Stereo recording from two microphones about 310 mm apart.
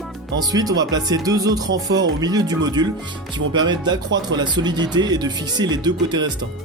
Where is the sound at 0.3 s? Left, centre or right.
Centre.